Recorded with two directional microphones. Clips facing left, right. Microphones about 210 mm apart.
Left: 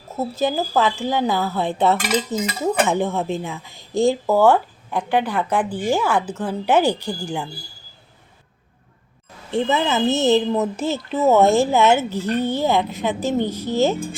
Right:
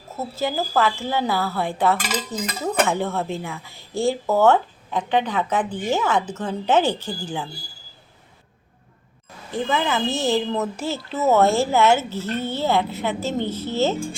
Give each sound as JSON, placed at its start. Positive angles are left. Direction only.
{"t": 0.2, "sound": "speech", "side_deg": 20}
{"t": 2.3, "sound": "stir", "side_deg": 20}
{"t": 2.8, "sound": "speech", "side_deg": 15}
{"t": 9.5, "sound": "speech", "side_deg": 25}